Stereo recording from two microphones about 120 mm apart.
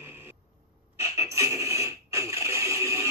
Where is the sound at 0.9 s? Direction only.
25° right (ahead or behind).